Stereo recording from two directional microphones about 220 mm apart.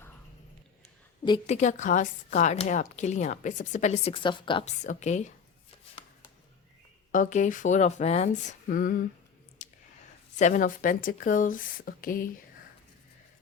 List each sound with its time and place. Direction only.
1.2 s a woman's voice: 25° left (ahead or behind)
7.1 s a woman's voice: 35° left (ahead or behind)
9.6 s a sound: 35° left (ahead or behind)
10.3 s a woman's voice: 35° left (ahead or behind)